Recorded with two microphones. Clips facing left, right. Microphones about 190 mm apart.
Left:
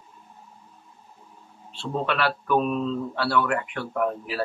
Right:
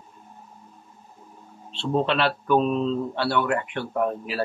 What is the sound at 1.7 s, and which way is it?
Speech, 25° right (ahead or behind).